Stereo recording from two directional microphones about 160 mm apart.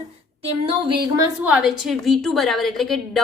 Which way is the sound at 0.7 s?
30° right (ahead or behind).